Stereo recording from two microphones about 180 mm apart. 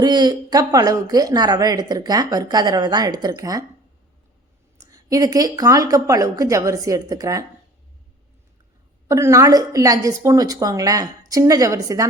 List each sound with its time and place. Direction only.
0.0 s a woman's voice: 25° right (ahead or behind)
4.9 s a woman's voice: 20° right (ahead or behind)
9.0 s a woman's voice: 15° right (ahead or behind)